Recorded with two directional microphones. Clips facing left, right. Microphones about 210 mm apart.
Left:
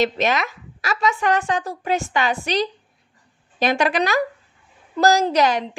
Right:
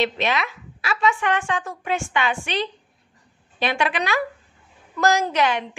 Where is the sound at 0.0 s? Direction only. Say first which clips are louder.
Left 3 dB; 45° left (ahead or behind).